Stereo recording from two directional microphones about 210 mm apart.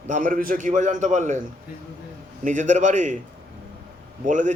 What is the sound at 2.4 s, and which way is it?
Speech, 35° right (ahead or behind).